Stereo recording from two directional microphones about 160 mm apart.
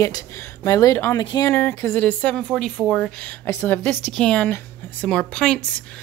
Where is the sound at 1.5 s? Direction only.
15° left (ahead or behind).